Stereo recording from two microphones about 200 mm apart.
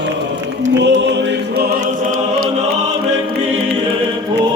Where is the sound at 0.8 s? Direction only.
60° right (ahead or behind).